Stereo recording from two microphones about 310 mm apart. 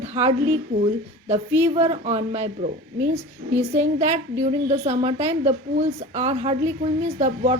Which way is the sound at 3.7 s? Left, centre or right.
Right.